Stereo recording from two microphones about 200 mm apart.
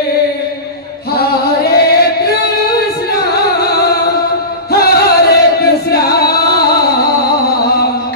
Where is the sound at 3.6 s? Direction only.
50° left (ahead or behind).